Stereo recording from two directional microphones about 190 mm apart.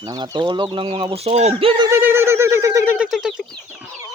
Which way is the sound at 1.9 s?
10° right (ahead or behind).